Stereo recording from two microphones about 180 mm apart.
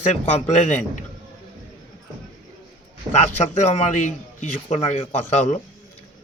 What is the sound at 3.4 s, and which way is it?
Speech, 40° left (ahead or behind).